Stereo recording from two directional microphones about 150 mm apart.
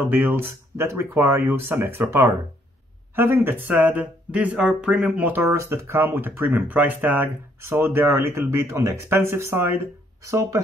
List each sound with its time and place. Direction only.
0.0 s speech: 15° right (ahead or behind)